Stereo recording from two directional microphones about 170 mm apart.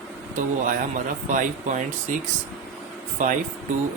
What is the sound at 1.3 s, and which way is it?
Speech, 50° right (ahead or behind).